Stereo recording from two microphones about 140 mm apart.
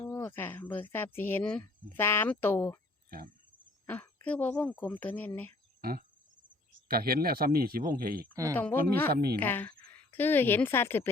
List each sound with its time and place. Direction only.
0.1 s speech: 15° left (ahead or behind)
3.8 s speech: 10° left (ahead or behind)
5.8 s cricket: 90° right
6.8 s speech: 90° right
8.5 s a woman's voice: 15° left (ahead or behind)